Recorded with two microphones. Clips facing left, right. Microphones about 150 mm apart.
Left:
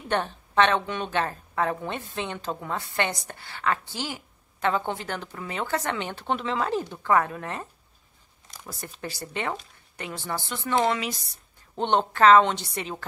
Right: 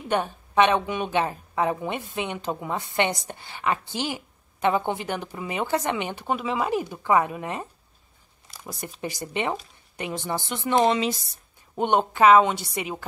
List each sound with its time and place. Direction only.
0.1 s a woman's voice: 15° right (ahead or behind)
8.5 s a sound: 10° right (ahead or behind)
9.0 s a woman's voice: 15° right (ahead or behind)
11.7 s a woman's voice: 10° right (ahead or behind)